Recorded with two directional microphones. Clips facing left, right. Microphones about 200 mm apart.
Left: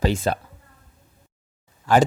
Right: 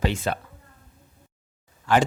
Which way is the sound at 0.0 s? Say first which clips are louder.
Left 4 dB; 40° left (ahead or behind).